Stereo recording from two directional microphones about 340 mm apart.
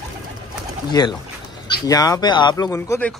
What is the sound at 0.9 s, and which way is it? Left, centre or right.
Speech, centre.